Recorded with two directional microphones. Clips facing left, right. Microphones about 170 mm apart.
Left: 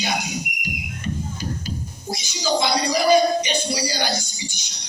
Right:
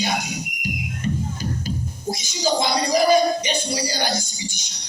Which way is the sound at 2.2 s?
45° right (ahead or behind).